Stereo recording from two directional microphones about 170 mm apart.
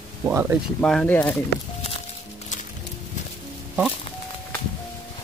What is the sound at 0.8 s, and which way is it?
Speech, 5° left (ahead or behind).